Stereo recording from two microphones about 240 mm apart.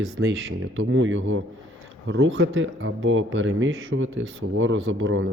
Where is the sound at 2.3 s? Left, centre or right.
Right.